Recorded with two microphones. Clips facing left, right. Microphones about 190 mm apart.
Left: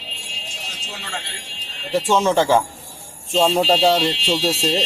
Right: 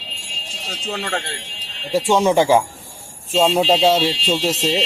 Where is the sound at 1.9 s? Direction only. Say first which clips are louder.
Right 2 dB; 15° right (ahead or behind).